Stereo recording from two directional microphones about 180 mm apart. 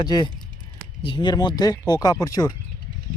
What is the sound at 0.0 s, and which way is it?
Speech, 25° left (ahead or behind).